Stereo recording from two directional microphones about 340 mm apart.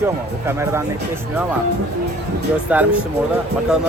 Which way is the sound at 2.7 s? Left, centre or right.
Centre.